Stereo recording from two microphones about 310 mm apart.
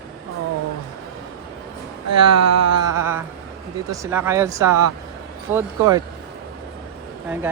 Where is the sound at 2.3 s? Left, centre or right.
Right.